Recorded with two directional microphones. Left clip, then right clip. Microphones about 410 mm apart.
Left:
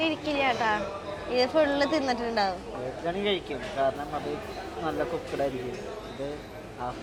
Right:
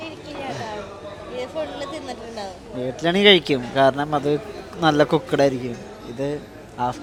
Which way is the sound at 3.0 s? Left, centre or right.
Right.